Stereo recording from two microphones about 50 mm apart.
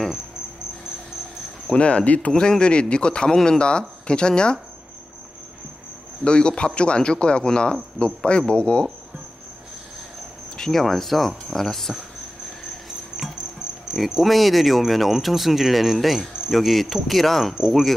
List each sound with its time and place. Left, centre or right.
1.7 s a man's voice: left
2.3 s a man's voice: centre
6.2 s a man's voice: centre
10.6 s speech: centre
13.2 s cricket: right
13.9 s speech: centre